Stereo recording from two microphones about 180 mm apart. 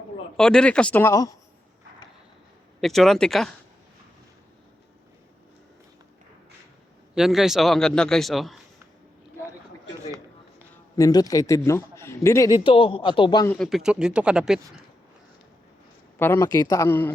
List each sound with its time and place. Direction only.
0.3 s a man's voice: 5° left (ahead or behind)
2.8 s a man's voice: centre (ahead or behind)
7.2 s a man's voice: centre (ahead or behind)
10.9 s a man's voice: 20° left (ahead or behind)
13.5 s a man's voice: centre (ahead or behind)
16.1 s speech: 15° left (ahead or behind)